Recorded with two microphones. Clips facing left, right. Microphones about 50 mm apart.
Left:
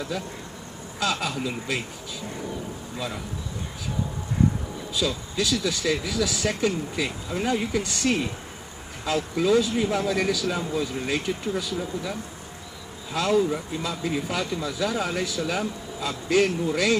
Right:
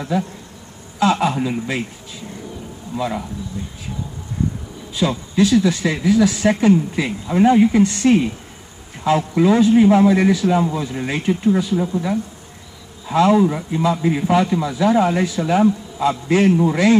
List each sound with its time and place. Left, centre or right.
0.1 s speech: right
3.0 s speech: right
4.9 s a man's voice: right
10.7 s speech: centre